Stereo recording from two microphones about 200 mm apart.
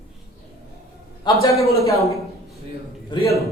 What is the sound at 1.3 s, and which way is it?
Speech, 20° left (ahead or behind).